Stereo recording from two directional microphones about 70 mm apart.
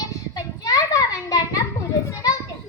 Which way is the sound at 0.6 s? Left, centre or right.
Left.